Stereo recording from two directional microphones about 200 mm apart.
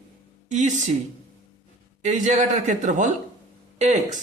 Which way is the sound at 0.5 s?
40° right (ahead or behind).